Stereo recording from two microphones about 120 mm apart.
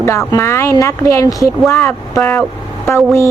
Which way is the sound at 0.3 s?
20° left (ahead or behind).